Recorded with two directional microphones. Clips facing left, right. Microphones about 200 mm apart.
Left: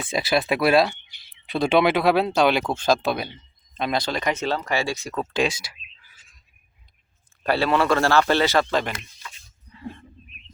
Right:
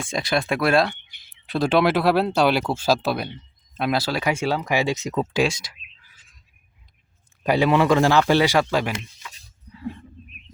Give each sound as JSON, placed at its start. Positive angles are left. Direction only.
{"t": 0.0, "sound": "speech", "side_deg": 5}
{"t": 5.3, "sound": "speech", "side_deg": 0}
{"t": 7.4, "sound": "speech", "side_deg": -15}
{"t": 9.7, "sound": "a sound", "side_deg": -5}